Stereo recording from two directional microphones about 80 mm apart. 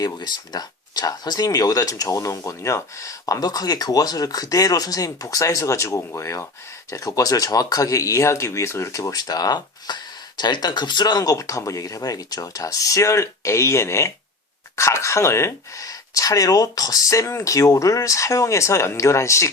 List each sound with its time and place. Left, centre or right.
0.0 s speech: left